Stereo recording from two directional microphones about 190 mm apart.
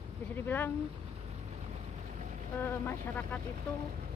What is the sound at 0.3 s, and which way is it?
Speech, 10° left (ahead or behind).